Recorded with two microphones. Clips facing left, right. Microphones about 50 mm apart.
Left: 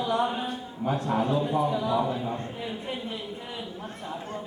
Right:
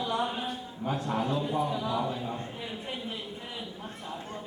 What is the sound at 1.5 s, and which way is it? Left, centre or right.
Speech, centre.